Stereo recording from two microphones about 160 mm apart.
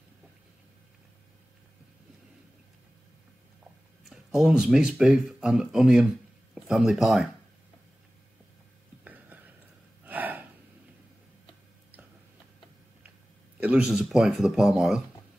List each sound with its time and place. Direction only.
4.0 s speech: centre (ahead or behind)
9.0 s a sound: 10° right (ahead or behind)
10.0 s gasp: 10° right (ahead or behind)
13.6 s speech: 10° right (ahead or behind)